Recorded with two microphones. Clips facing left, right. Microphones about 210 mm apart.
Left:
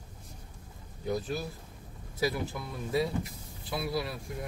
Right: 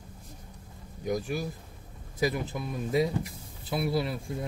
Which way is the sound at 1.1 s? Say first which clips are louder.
Right 2 dB; 10° right (ahead or behind).